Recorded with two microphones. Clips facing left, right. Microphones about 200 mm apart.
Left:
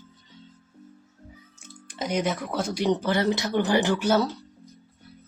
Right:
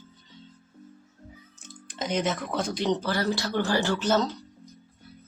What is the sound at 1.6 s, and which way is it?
Speech, 10° left (ahead or behind).